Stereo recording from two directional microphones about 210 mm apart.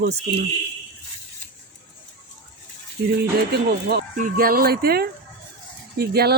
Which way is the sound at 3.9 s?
40° right (ahead or behind).